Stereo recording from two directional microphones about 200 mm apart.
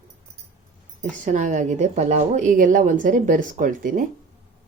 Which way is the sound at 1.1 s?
40° right (ahead or behind).